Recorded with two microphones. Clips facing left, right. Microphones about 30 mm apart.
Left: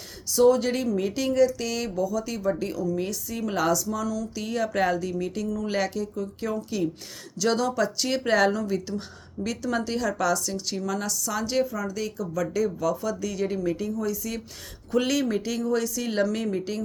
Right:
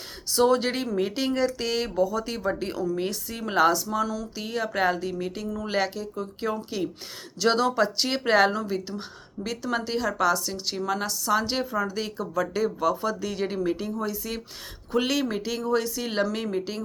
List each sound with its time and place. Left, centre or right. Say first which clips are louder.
0.3 s speech: left 2 dB; right
14.9 s speech: left 1 dB; centre